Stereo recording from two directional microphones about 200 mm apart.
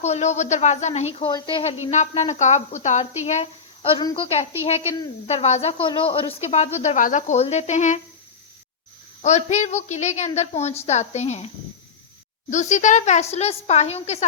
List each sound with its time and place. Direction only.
0.0 s speech: 35° left (ahead or behind)
1.3 s speech: 25° left (ahead or behind)
9.2 s speech: 35° left (ahead or behind)
12.5 s speech: 35° left (ahead or behind)